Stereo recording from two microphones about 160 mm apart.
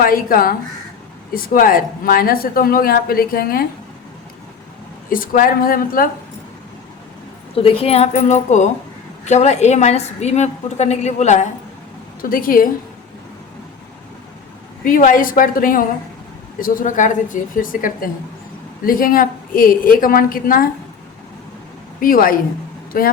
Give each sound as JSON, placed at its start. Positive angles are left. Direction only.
{"t": 0.0, "sound": "speech", "side_deg": 65}
{"t": 5.0, "sound": "speech", "side_deg": 60}
{"t": 7.5, "sound": "a woman's voice", "side_deg": 35}
{"t": 12.2, "sound": "speech", "side_deg": 60}
{"t": 14.8, "sound": "speech", "side_deg": 55}
{"t": 22.0, "sound": "speech", "side_deg": 60}